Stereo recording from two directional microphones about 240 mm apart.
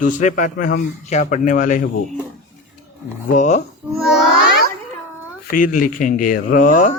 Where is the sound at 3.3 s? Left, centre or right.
Left.